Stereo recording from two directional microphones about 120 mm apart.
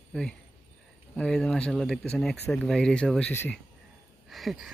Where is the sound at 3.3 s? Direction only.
15° left (ahead or behind).